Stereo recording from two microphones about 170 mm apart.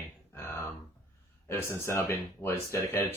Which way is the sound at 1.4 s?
15° left (ahead or behind).